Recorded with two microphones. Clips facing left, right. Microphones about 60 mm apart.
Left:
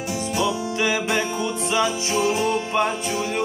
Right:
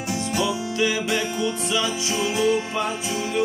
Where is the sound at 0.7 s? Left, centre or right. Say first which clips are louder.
Even; left.